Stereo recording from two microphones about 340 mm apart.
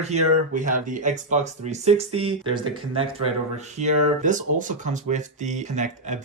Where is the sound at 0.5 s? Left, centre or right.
Right.